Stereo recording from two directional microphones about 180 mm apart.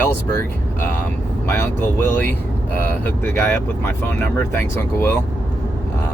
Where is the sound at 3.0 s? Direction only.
10° left (ahead or behind).